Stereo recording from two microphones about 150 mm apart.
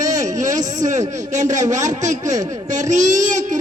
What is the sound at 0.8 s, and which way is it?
A man's voice, 55° right (ahead or behind).